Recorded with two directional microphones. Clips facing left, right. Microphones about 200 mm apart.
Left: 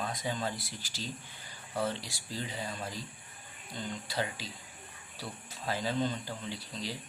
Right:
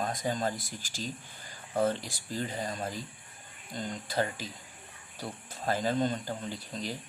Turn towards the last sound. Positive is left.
turn(degrees=-45)  # may be behind; listen again after turning